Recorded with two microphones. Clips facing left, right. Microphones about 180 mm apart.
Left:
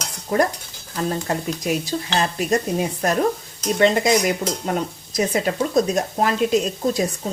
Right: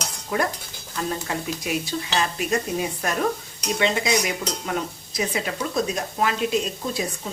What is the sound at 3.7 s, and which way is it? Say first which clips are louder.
Speech: left 6 dB; 45° left (ahead or behind).